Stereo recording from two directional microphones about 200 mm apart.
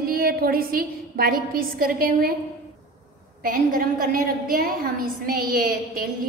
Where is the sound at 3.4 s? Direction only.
45° right (ahead or behind).